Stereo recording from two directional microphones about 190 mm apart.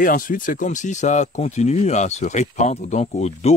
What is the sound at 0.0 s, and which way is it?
Speech, 45° left (ahead or behind).